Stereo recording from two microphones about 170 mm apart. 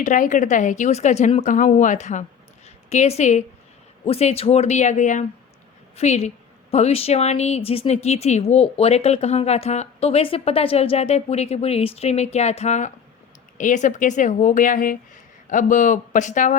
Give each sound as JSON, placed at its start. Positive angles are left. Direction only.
{"t": 0.0, "sound": "a woman's voice", "side_deg": 50}